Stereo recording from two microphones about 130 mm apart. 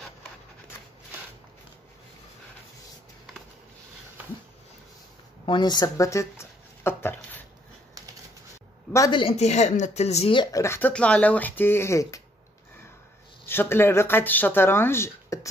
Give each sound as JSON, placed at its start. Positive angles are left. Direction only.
{"t": 5.4, "sound": "speech", "side_deg": 35}
{"t": 9.4, "sound": "speech", "side_deg": 60}
{"t": 10.3, "sound": "speech", "side_deg": 30}
{"t": 10.9, "sound": "speech", "side_deg": 10}
{"t": 13.5, "sound": "speech", "side_deg": 15}